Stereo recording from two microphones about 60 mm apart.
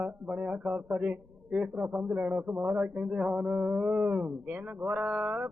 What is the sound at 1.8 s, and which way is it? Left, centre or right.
Speech, right.